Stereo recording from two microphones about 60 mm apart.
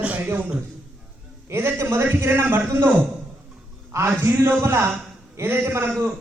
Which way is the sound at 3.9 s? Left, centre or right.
Right.